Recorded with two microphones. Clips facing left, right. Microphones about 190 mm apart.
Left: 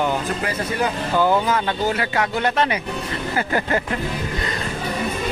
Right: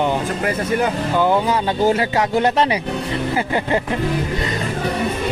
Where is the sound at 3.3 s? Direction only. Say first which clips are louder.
Right 1 dB; 20° right (ahead or behind).